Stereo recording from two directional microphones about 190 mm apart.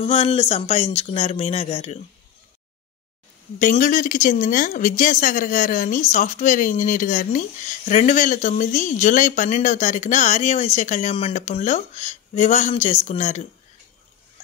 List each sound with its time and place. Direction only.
0.0 s speech: 35° left (ahead or behind)
3.5 s speech: 40° left (ahead or behind)